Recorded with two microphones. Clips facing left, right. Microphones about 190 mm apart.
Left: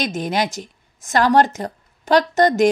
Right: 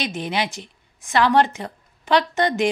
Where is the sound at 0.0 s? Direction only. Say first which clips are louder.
Left 4 dB; 45° left (ahead or behind).